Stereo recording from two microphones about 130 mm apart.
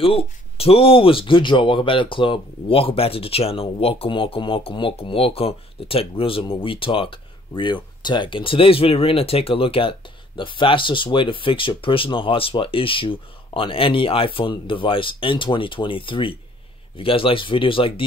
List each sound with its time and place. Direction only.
0.0 s speech: 45° left (ahead or behind)